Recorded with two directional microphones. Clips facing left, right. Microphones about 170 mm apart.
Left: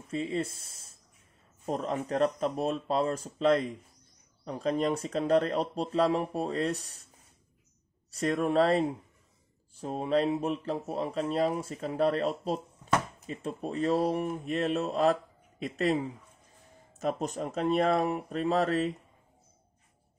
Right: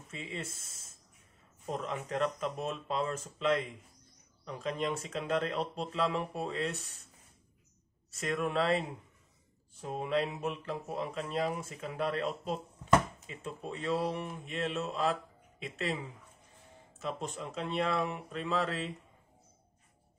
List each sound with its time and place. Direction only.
0.1 s speech: 35° left (ahead or behind)
8.1 s speech: 35° left (ahead or behind)